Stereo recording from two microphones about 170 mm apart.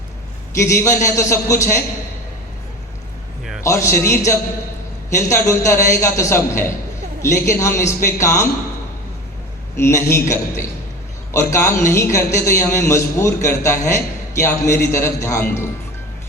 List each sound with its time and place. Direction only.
0.5 s a man's voice: 15° left (ahead or behind)
3.6 s a man's voice: 15° left (ahead or behind)
9.7 s a man's voice: 15° left (ahead or behind)